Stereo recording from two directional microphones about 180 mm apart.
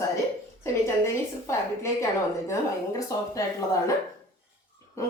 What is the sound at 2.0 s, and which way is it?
A woman's voice, 15° left (ahead or behind).